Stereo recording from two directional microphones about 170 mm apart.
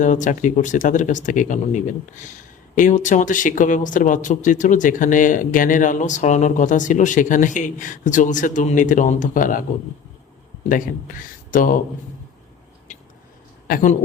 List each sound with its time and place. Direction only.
0.0 s speech: 50° left (ahead or behind)
13.7 s speech: 55° left (ahead or behind)